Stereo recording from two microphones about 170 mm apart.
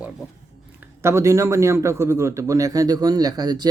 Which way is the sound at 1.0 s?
15° right (ahead or behind).